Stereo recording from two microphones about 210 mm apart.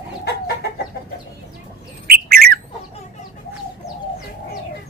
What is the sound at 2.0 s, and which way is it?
Bird, 45° right (ahead or behind).